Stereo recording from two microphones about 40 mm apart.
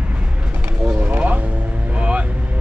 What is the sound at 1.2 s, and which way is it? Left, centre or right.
Vehicle, right.